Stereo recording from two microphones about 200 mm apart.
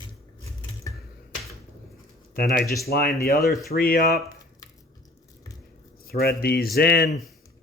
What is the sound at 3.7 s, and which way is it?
Speech, 50° left (ahead or behind).